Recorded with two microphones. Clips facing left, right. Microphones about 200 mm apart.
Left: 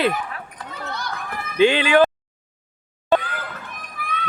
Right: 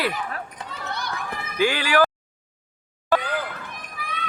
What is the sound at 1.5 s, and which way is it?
Speech, 20° left (ahead or behind).